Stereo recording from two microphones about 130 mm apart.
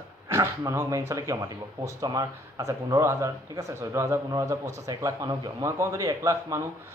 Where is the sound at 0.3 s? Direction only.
20° right (ahead or behind).